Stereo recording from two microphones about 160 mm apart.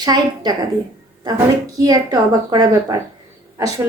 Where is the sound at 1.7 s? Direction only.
25° right (ahead or behind).